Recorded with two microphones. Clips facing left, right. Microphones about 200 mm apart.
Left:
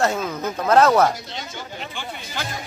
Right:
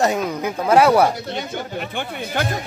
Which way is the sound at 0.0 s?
15° right (ahead or behind).